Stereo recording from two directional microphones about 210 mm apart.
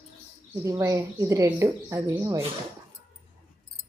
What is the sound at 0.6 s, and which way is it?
A woman's voice, 15° right (ahead or behind).